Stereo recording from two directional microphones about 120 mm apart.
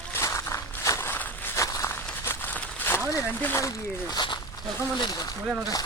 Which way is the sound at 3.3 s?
20° left (ahead or behind).